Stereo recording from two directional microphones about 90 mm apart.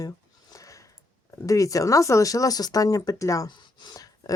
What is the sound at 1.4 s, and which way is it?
Speech, 40° left (ahead or behind).